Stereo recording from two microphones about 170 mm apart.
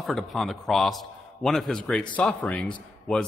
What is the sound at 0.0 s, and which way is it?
A man's voice, centre (ahead or behind).